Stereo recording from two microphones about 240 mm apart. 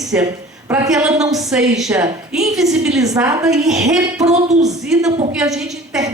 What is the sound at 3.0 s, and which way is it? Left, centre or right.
Speech, centre.